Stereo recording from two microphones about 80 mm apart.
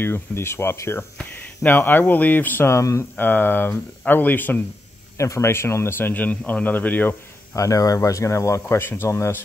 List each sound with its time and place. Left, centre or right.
0.0 s speech: left
1.1 s speech: left
3.2 s speech: left
5.1 s speech: left
7.5 s speech: left